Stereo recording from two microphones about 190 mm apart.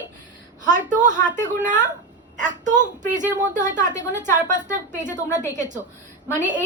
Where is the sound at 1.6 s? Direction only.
40° right (ahead or behind).